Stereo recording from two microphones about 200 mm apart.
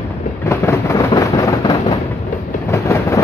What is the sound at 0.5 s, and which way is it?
Vehicle, 15° left (ahead or behind).